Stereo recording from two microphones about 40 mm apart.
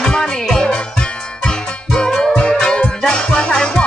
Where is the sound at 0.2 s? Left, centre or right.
Centre.